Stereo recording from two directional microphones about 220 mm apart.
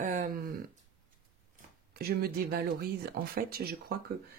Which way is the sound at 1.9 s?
45° right (ahead or behind).